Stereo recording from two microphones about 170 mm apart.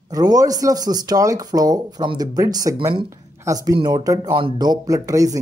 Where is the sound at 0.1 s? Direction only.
20° right (ahead or behind).